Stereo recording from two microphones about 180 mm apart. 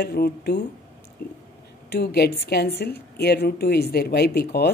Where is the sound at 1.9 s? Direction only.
65° left (ahead or behind).